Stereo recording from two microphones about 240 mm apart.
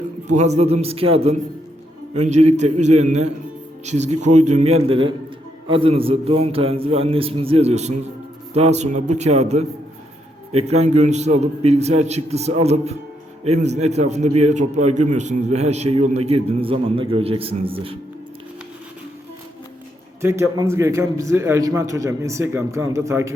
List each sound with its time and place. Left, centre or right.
0.3 s a man's voice: right
20.2 s a man's voice: centre